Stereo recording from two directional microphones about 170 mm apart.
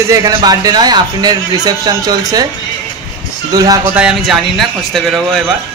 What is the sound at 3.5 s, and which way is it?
Speech, 20° right (ahead or behind).